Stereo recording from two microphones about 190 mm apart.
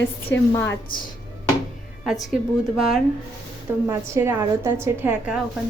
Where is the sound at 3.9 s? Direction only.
15° right (ahead or behind).